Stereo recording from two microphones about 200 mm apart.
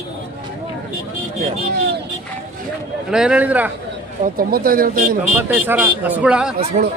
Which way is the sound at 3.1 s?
5° right (ahead or behind).